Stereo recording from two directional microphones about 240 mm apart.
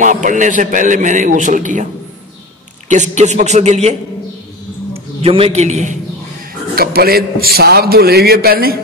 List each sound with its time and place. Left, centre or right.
0.0 s a man's voice: right
2.9 s a man's voice: right
4.9 s a man's voice: right
6.7 s a man's voice: right